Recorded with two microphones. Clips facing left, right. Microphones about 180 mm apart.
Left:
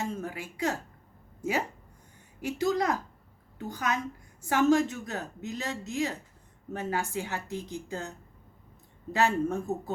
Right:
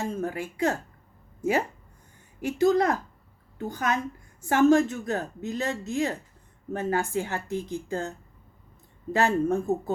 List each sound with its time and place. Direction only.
0.0 s a woman's voice: 50° right (ahead or behind)
2.4 s a woman's voice: 55° right (ahead or behind)
9.1 s a woman's voice: 50° right (ahead or behind)